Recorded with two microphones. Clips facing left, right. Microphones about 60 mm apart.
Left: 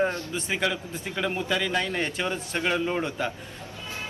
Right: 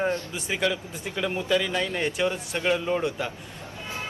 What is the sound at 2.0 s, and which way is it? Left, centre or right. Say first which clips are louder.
Speech: right 3 dB; centre.